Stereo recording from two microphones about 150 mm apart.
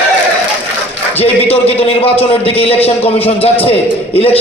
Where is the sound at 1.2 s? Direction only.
40° left (ahead or behind).